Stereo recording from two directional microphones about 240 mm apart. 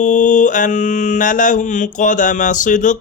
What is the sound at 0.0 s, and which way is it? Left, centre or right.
Mantra, left.